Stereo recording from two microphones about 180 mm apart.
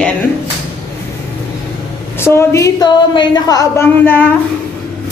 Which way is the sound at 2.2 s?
15° left (ahead or behind).